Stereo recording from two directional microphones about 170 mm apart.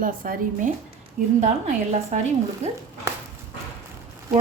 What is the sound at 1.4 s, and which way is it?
Speech, 45° right (ahead or behind).